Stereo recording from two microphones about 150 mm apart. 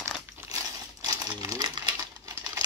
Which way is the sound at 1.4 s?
25° right (ahead or behind).